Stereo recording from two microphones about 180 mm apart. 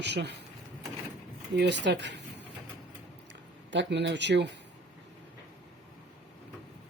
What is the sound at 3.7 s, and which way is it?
Speech, 75° right (ahead or behind).